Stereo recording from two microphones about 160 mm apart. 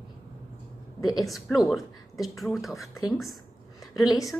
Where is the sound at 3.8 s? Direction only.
Centre (ahead or behind).